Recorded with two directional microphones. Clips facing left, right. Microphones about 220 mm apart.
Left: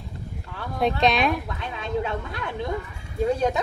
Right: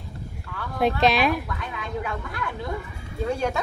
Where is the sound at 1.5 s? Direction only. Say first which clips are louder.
Left 3 dB; 25° left (ahead or behind).